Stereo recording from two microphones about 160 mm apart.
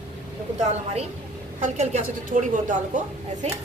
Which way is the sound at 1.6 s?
45° right (ahead or behind).